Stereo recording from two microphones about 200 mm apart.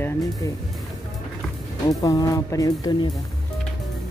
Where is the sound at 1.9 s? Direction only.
20° left (ahead or behind).